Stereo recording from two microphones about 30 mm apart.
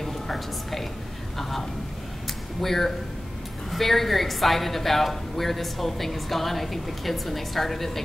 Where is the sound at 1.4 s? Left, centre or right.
Centre.